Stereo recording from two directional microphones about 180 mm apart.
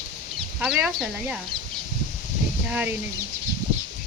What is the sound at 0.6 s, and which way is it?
Speech, 5° right (ahead or behind).